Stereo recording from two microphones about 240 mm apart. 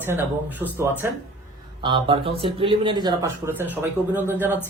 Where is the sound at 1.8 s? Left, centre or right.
Centre.